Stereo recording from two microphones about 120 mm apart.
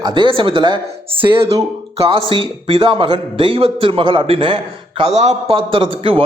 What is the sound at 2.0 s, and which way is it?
A man's voice, 50° right (ahead or behind).